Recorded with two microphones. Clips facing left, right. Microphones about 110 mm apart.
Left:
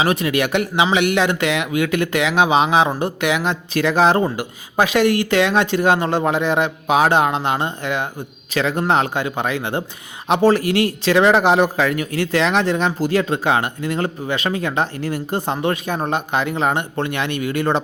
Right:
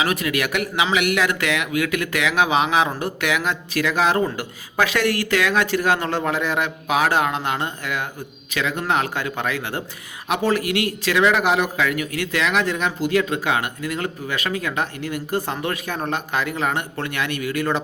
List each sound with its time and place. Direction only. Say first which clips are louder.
0.0 s a man's voice: left 4 dB; 30° left (ahead or behind)
4.4 s a man's voice: left 3 dB; 20° left (ahead or behind)